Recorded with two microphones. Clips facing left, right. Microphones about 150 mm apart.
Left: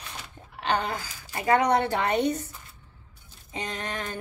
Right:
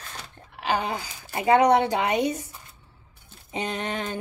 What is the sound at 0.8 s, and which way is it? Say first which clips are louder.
A woman's voice: right 2 dB; 15° right (ahead or behind).